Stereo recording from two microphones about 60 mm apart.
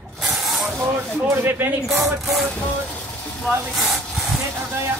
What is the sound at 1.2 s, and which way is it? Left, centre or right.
Speech, right.